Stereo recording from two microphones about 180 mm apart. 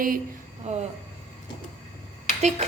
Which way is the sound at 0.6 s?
40° right (ahead or behind).